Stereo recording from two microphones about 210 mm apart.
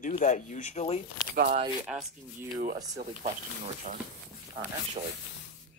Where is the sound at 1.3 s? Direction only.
40° right (ahead or behind).